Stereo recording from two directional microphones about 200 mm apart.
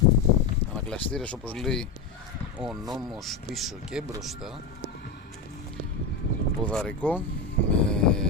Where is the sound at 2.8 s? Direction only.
20° right (ahead or behind).